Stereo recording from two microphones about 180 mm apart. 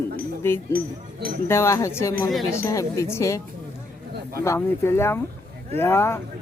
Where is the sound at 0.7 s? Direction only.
55° right (ahead or behind).